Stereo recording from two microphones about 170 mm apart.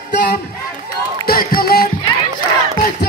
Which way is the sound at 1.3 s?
60° left (ahead or behind).